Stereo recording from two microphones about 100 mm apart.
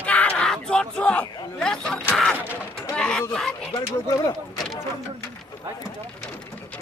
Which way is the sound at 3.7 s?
40° left (ahead or behind).